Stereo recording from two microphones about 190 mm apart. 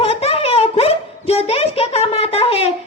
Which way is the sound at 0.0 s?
30° left (ahead or behind).